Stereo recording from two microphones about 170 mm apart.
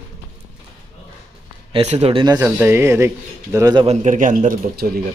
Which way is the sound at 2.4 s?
15° right (ahead or behind).